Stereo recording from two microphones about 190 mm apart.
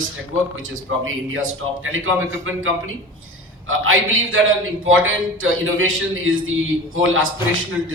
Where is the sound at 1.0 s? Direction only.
90° right.